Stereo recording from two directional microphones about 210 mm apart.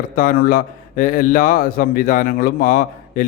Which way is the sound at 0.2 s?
40° left (ahead or behind).